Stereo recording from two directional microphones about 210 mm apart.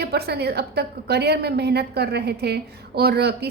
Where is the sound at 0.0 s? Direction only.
50° right (ahead or behind).